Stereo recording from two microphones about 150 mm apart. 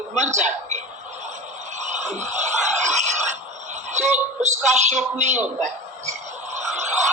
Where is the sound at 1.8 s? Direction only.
50° right (ahead or behind).